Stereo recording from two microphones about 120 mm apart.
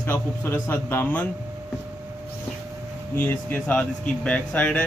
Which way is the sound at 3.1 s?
15° left (ahead or behind).